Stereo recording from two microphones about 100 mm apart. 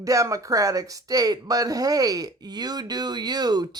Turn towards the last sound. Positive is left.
turn(degrees=-40)  # may be behind; listen again after turning